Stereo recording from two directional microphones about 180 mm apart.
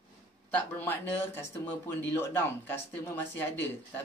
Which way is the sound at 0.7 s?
10° left (ahead or behind).